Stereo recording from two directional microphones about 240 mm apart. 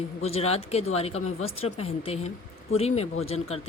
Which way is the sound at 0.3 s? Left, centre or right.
Left.